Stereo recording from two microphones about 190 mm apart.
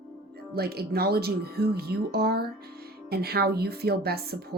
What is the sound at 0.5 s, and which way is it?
Speech, 55° right (ahead or behind).